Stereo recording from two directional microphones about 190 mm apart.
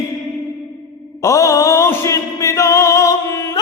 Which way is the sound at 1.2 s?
15° left (ahead or behind).